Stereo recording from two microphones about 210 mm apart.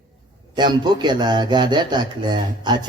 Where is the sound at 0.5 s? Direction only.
20° right (ahead or behind).